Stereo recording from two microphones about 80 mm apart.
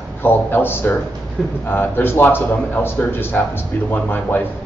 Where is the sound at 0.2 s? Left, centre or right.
Left.